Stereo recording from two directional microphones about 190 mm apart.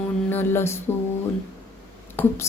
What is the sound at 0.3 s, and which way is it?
Music, 10° left (ahead or behind).